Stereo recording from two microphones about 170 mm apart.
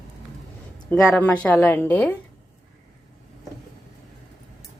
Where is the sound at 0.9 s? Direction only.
10° left (ahead or behind).